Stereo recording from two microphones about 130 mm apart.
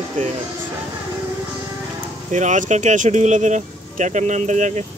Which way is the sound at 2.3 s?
70° right (ahead or behind).